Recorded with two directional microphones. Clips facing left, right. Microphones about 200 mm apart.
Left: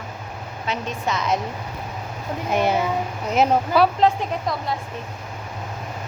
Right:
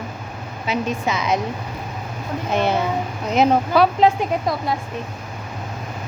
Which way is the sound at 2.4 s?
10° left (ahead or behind).